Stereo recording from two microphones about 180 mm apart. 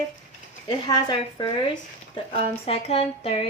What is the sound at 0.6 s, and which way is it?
A woman's voice, 25° left (ahead or behind).